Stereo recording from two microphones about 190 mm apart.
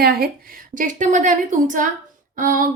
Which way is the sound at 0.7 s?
40° right (ahead or behind).